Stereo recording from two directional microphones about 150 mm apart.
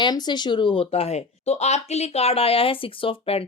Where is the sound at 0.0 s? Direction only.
30° left (ahead or behind).